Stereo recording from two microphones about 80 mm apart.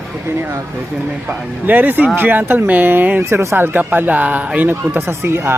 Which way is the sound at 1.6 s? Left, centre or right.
Right.